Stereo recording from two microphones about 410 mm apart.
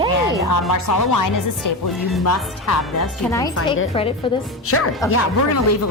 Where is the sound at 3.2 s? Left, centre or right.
Centre.